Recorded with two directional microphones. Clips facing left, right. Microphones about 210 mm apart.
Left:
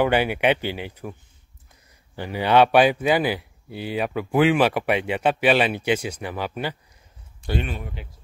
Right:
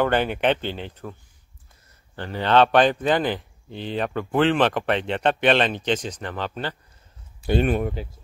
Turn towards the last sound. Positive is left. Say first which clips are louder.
# right 11 dB
turn(degrees=-55)  # may be behind; listen again after turning